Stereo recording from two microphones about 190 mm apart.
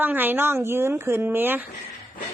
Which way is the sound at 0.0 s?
10° right (ahead or behind).